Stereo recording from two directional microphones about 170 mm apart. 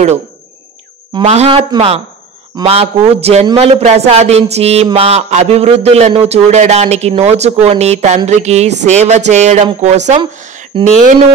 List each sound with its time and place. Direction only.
1.2 s a man's voice: 40° right (ahead or behind)
2.6 s a man's voice: 35° right (ahead or behind)